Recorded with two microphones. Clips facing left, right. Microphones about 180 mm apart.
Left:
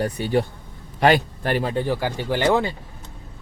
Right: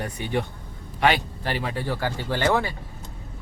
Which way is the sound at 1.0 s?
45° left (ahead or behind).